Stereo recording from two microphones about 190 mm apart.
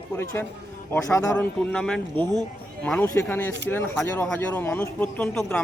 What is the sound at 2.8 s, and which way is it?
Speech, 10° left (ahead or behind).